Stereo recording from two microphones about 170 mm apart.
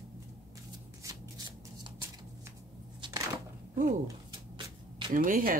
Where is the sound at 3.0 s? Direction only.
20° right (ahead or behind).